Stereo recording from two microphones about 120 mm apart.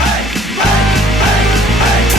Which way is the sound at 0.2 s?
Centre (ahead or behind).